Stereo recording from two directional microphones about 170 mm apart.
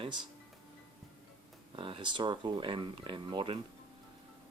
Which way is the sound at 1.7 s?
30° right (ahead or behind).